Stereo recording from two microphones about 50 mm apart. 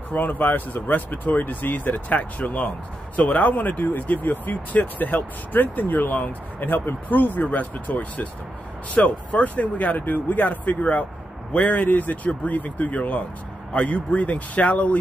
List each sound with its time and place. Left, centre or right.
0.1 s speech: left